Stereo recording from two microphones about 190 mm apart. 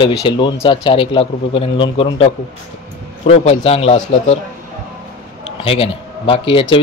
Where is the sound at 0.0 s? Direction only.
25° left (ahead or behind).